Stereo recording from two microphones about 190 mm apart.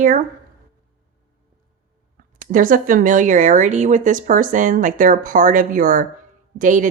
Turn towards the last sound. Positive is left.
turn(degrees=-45)  # may be behind; listen again after turning